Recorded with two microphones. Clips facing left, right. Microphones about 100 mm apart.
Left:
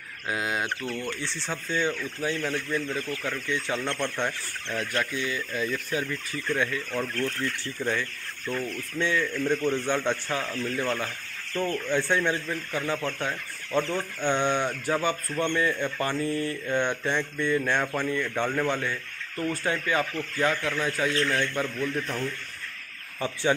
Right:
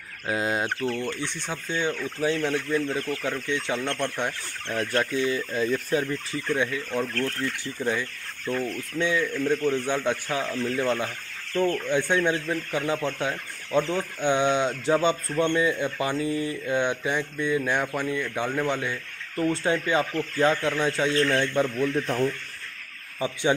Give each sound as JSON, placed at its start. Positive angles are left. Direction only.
{"t": 0.3, "sound": "speech", "side_deg": -30}
{"t": 1.2, "sound": "speech", "side_deg": -15}
{"t": 6.5, "sound": "speech", "side_deg": -15}
{"t": 7.8, "sound": "speech", "side_deg": -15}